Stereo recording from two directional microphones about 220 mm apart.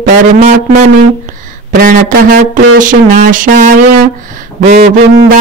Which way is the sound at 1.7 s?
40° right (ahead or behind).